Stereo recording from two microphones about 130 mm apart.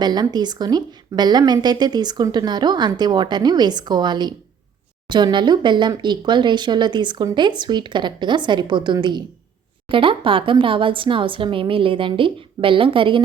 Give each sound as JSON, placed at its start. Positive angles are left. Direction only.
{"t": 0.0, "sound": "a woman's voice", "side_deg": -35}